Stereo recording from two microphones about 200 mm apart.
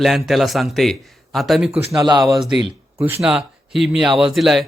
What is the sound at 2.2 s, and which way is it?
A man's voice, centre (ahead or behind).